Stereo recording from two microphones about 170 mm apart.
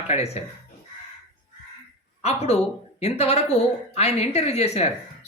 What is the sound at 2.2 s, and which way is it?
Speech, 40° left (ahead or behind).